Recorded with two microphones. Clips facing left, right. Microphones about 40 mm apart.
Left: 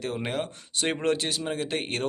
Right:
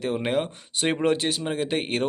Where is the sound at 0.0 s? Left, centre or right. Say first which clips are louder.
Right 5 dB; centre.